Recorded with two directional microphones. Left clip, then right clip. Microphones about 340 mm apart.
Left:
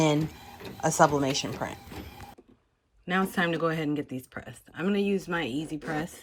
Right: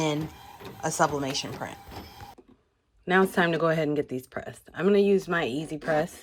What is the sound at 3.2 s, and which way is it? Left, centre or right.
Speech, centre.